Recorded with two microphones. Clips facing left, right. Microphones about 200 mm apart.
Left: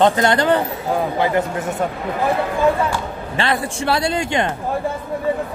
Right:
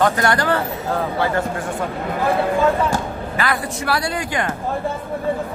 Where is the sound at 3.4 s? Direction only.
25° left (ahead or behind).